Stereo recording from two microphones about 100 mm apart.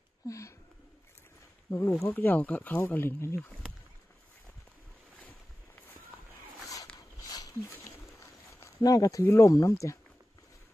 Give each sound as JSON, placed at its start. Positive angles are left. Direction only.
{"t": 0.3, "sound": "speech", "side_deg": 30}
{"t": 1.7, "sound": "speech", "side_deg": 25}
{"t": 7.2, "sound": "dog", "side_deg": 40}
{"t": 8.2, "sound": "a sound", "side_deg": 35}
{"t": 9.2, "sound": "speech", "side_deg": 30}